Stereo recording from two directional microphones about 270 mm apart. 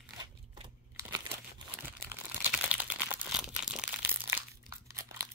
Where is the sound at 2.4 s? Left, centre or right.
Centre.